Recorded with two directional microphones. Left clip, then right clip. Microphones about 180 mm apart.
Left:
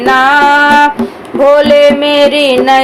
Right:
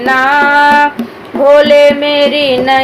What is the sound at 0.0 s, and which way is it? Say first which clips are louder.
Music: left 2 dB; 30° left (ahead or behind).